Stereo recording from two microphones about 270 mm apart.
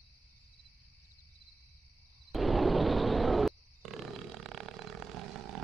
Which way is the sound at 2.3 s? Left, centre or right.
Centre.